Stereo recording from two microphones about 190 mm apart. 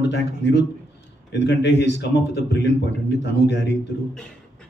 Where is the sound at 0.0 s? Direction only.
65° left (ahead or behind).